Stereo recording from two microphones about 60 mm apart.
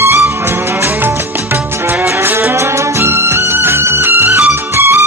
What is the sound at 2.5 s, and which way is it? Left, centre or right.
Music, right.